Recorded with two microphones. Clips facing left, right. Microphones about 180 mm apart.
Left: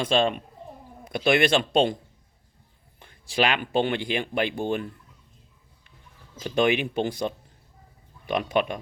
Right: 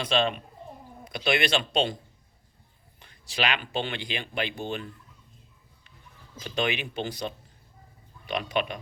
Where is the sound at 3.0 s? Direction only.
50° left (ahead or behind).